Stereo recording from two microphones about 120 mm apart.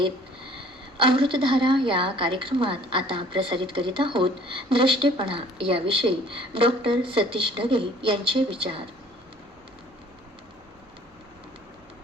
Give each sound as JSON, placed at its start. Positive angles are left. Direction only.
{"t": 1.0, "sound": "a woman's voice", "side_deg": -45}